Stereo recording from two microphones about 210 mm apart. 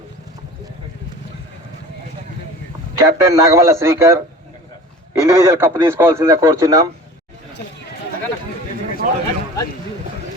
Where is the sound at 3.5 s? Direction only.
15° right (ahead or behind).